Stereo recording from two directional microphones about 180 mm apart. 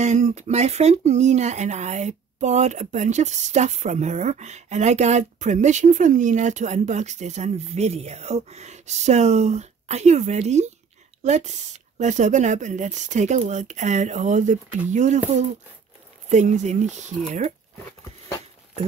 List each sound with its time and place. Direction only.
0.0 s speech: 40° right (ahead or behind)